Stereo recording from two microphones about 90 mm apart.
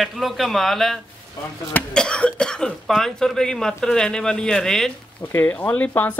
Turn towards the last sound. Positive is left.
turn(degrees=20)  # may be behind; listen again after turning